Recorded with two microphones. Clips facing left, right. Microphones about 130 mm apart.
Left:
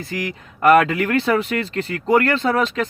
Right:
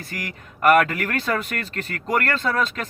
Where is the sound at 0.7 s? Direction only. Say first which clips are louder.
Left 4 dB; 25° left (ahead or behind).